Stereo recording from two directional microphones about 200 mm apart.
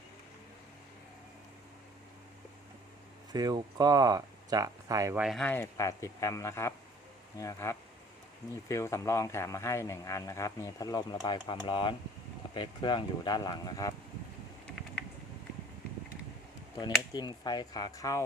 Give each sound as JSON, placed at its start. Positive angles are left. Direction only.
{"t": 3.3, "sound": "speech", "side_deg": -20}
{"t": 5.2, "sound": "speech", "side_deg": 0}
{"t": 17.2, "sound": "speech", "side_deg": 20}